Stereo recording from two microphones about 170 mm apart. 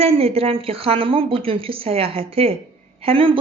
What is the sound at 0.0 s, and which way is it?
A woman's voice, 35° right (ahead or behind).